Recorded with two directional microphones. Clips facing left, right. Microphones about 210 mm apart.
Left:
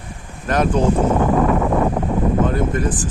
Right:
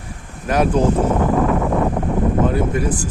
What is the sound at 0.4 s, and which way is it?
Speech, 10° right (ahead or behind).